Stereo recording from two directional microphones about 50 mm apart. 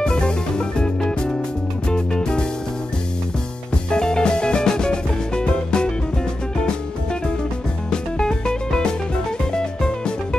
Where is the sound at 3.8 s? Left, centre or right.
Centre.